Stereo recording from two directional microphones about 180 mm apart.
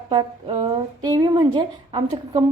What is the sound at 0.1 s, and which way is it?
A woman's voice, 25° right (ahead or behind).